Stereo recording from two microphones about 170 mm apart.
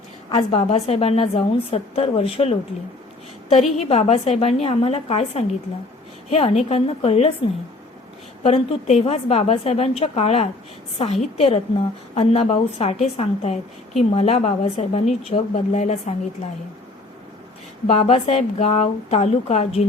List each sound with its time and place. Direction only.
0.3 s a woman's voice: 25° left (ahead or behind)
0.7 s speech: 40° left (ahead or behind)
3.8 s speech: 40° left (ahead or behind)
8.4 s speech: 35° left (ahead or behind)
17.8 s speech: 40° left (ahead or behind)